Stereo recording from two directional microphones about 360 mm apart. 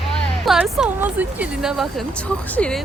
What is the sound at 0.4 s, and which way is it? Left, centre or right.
Speech, centre.